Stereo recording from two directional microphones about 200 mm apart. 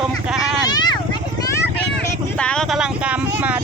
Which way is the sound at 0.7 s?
20° left (ahead or behind).